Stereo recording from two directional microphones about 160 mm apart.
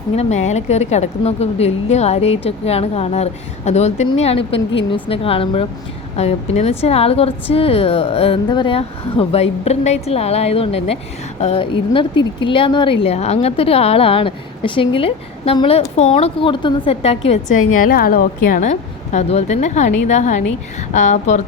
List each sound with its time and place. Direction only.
0.2 s a woman's voice: 45° left (ahead or behind)